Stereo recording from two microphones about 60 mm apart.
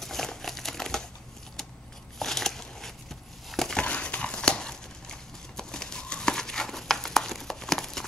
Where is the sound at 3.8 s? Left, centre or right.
Centre.